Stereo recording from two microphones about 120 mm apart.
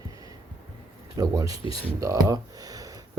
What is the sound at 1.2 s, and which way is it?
Speech, 30° right (ahead or behind).